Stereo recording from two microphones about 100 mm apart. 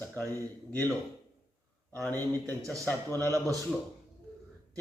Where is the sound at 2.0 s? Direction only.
15° left (ahead or behind).